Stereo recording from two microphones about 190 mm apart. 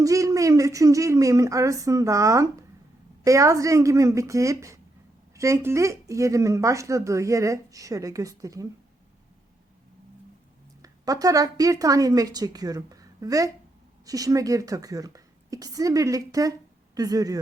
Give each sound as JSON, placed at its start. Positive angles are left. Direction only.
{"t": 0.0, "sound": "speech", "side_deg": -15}
{"t": 10.8, "sound": "a woman's voice", "side_deg": -20}